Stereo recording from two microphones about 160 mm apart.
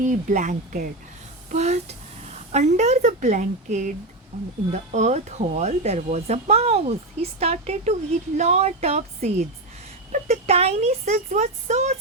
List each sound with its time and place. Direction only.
0.0 s speech: 50° right (ahead or behind)